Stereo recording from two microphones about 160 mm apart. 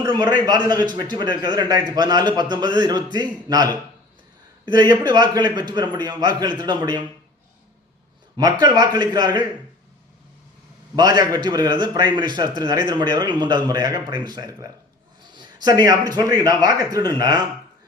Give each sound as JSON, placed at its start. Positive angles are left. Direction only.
{"t": 0.0, "sound": "a man's voice", "side_deg": -25}
{"t": 8.4, "sound": "a man's voice", "side_deg": -25}
{"t": 10.9, "sound": "a man's voice", "side_deg": -25}